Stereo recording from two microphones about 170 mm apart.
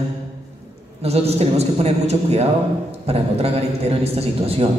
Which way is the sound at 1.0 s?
35° right (ahead or behind).